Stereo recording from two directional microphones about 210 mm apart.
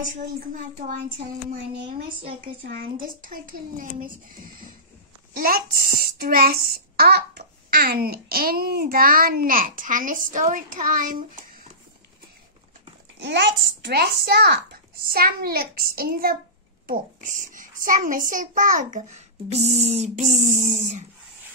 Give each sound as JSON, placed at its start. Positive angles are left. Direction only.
{"t": 2.6, "sound": "a child's voice", "side_deg": -45}
{"t": 5.3, "sound": "a child's voice", "side_deg": -45}
{"t": 13.2, "sound": "a child's voice", "side_deg": -55}